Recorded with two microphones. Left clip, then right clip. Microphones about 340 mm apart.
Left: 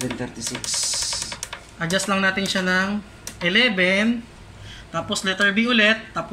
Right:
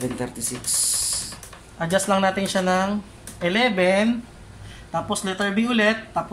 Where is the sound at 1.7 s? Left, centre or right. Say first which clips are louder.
Right 2 dB; right.